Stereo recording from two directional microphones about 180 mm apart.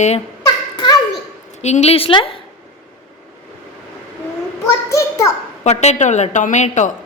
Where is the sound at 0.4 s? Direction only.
20° left (ahead or behind).